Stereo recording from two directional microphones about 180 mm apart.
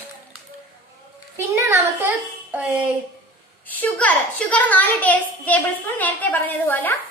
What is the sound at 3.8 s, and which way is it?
A woman's voice, 10° left (ahead or behind).